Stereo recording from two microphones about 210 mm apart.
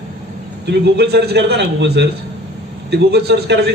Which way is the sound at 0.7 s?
50° right (ahead or behind).